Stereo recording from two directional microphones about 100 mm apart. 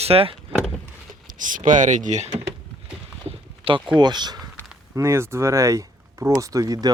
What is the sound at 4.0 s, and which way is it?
Speech, 45° right (ahead or behind).